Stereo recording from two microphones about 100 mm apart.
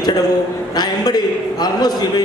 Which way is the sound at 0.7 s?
45° left (ahead or behind).